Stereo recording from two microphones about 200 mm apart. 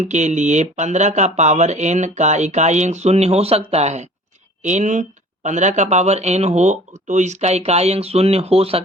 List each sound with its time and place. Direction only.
0.0 s speech: 35° right (ahead or behind)